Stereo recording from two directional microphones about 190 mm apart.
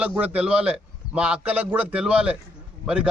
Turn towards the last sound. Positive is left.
turn(degrees=-5)  # may be behind; listen again after turning